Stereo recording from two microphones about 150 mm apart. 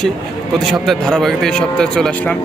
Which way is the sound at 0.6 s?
Centre (ahead or behind).